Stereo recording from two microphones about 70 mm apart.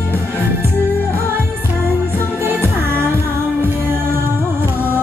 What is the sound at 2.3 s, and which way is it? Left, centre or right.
Music, right.